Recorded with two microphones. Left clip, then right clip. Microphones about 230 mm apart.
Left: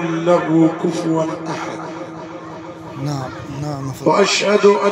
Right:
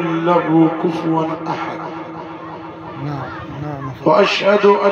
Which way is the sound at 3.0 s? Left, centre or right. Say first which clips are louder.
Left 1 dB; left.